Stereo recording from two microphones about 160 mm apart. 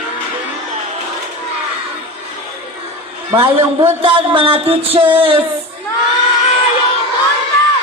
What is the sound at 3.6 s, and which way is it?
Speech, 30° right (ahead or behind).